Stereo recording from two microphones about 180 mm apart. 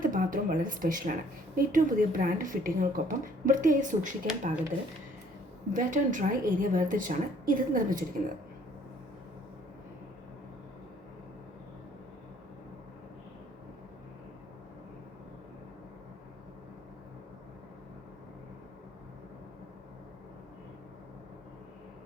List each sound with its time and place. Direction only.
0.0 s speech: 50° right (ahead or behind)
5.7 s speech: 45° right (ahead or behind)